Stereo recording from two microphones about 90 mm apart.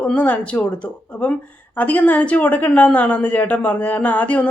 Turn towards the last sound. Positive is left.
turn(degrees=15)  # may be behind; listen again after turning